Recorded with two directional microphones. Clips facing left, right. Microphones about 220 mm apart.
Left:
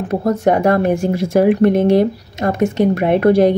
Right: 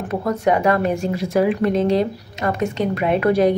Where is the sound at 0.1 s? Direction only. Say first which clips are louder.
Left 4 dB; 45° left (ahead or behind).